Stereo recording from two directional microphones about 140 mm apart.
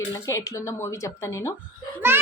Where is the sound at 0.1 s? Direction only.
25° left (ahead or behind).